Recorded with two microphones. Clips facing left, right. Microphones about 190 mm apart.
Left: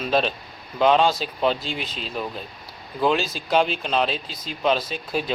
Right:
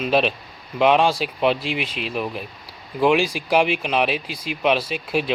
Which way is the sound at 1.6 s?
80° right.